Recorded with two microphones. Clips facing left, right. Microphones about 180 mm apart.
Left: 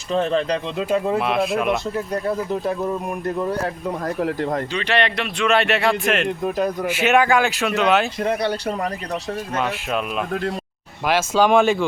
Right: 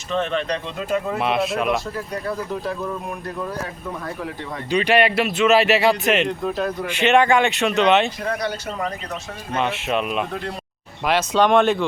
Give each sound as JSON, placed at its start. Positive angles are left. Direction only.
{"t": 0.1, "sound": "speech", "side_deg": 35}
{"t": 1.2, "sound": "speech", "side_deg": 0}
{"t": 4.0, "sound": "speech", "side_deg": 40}
{"t": 4.7, "sound": "speech", "side_deg": -15}
{"t": 6.4, "sound": "speech", "side_deg": 15}
{"t": 8.2, "sound": "speech", "side_deg": 25}
{"t": 9.6, "sound": "speech", "side_deg": 0}